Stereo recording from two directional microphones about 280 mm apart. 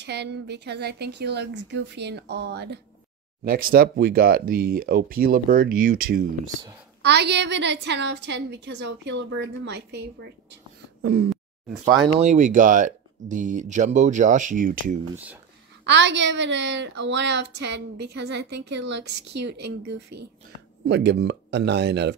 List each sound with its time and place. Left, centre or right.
0.0 s a woman's voice: right
12.0 s speech: right
15.8 s a woman's voice: right
20.1 s speech: right
20.8 s a woman's voice: right